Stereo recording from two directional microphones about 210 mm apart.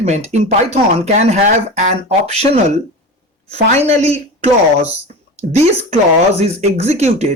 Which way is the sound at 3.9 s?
30° right (ahead or behind).